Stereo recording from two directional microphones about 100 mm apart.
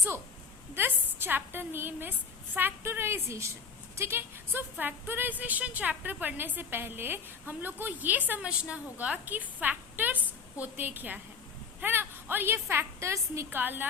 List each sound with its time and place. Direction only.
0.7 s a woman's voice: 20° right (ahead or behind)